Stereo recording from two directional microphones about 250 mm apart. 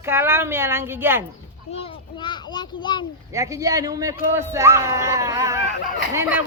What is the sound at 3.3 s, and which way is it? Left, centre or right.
Speech, centre.